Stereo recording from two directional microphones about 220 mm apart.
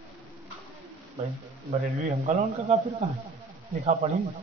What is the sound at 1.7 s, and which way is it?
Speech, 30° right (ahead or behind).